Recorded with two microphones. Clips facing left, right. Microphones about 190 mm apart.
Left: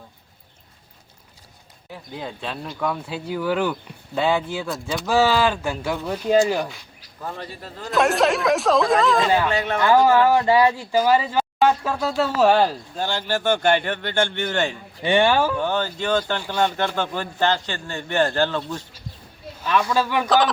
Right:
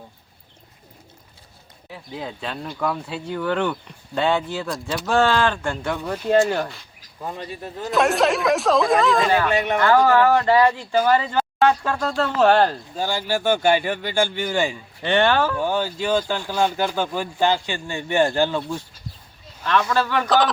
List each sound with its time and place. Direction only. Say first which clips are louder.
1.9 s speech: right 1 dB; centre (ahead or behind)
7.2 s speech: right 2 dB; 15° right (ahead or behind)
7.9 s speech: even; centre (ahead or behind)
9.5 s speech: right 2 dB; 15° right (ahead or behind)
9.8 s speech: left 1 dB; 15° left (ahead or behind)
13.0 s speech: right 1 dB; 10° right (ahead or behind)
15.0 s speech: left 1 dB; 10° left (ahead or behind)
15.5 s speech: right 1 dB; 10° right (ahead or behind)
19.6 s speech: even; 10° left (ahead or behind)